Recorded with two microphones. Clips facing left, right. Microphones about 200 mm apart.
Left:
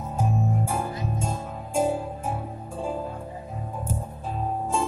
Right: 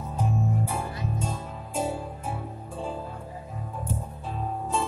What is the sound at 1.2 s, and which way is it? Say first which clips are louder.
Music: left 2 dB; 45° left (ahead or behind).